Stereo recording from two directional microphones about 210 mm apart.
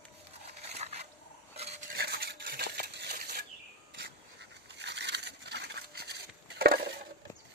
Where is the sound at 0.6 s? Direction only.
30° right (ahead or behind).